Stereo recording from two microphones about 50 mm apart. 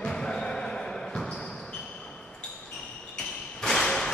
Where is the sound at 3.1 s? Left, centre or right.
Centre.